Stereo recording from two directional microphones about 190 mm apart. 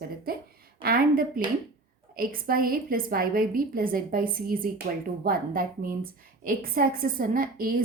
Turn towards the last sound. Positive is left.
turn(degrees=-50)  # may be behind; listen again after turning